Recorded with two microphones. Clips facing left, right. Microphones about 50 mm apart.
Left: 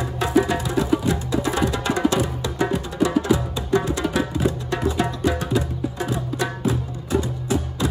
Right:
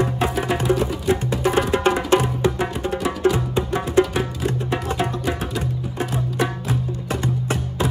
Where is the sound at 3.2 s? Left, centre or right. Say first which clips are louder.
Right 3 dB; right.